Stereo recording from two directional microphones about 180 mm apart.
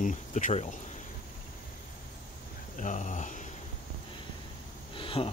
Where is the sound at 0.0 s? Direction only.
45° left (ahead or behind).